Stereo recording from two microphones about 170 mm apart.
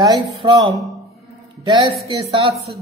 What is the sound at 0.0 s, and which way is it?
A man's voice, 25° right (ahead or behind).